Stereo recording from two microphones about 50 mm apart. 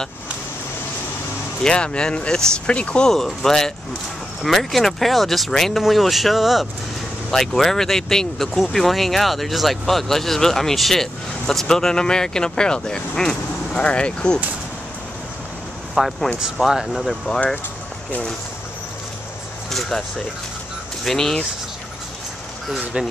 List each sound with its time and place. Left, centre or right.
1.6 s speech: centre
3.1 s speech: centre
13.7 s speech: left
16.0 s speech: centre
21.0 s speech: centre
23.0 s speech: centre